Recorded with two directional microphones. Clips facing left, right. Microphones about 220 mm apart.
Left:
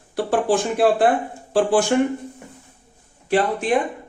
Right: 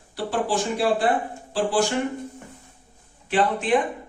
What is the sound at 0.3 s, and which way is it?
Speech, 55° left (ahead or behind).